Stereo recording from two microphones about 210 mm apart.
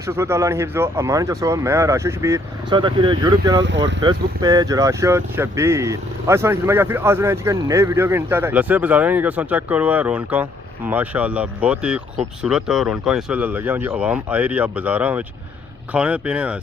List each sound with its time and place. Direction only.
0.1 s speech: 10° right (ahead or behind)
3.6 s speech: 60° right (ahead or behind)
4.0 s speech: 20° right (ahead or behind)